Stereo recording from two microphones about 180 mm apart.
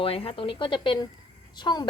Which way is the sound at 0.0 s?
30° left (ahead or behind).